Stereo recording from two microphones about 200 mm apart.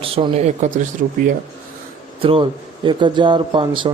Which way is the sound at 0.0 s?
30° right (ahead or behind).